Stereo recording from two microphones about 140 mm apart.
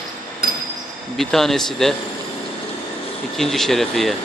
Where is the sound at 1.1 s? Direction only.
Centre (ahead or behind).